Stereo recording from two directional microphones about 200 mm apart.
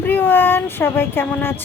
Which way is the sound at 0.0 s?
10° left (ahead or behind).